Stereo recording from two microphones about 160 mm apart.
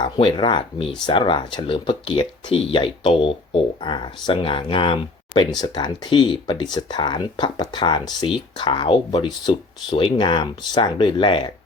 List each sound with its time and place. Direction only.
0.0 s speech: 30° left (ahead or behind)